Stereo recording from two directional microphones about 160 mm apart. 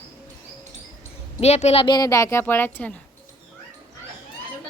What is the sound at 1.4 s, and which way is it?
Speech, 40° left (ahead or behind).